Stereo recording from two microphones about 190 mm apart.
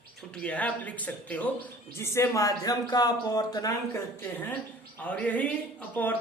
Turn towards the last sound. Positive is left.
turn(degrees=10)  # may be behind; listen again after turning